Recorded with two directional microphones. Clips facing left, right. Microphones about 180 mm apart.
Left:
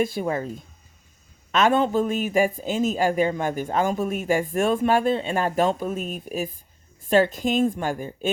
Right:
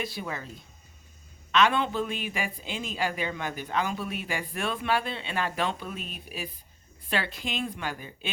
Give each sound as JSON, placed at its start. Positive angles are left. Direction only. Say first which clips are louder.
{"t": 0.0, "sound": "a man's voice", "louder": "left 10 dB", "side_deg": 45}